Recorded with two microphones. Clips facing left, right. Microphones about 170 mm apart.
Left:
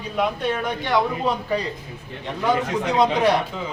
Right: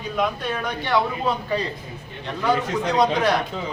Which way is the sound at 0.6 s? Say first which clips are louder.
Right 1 dB; 15° left (ahead or behind).